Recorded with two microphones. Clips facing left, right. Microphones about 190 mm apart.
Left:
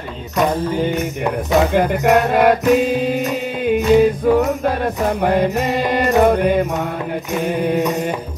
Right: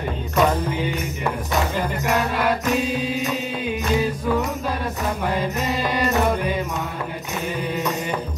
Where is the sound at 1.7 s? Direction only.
55° left (ahead or behind).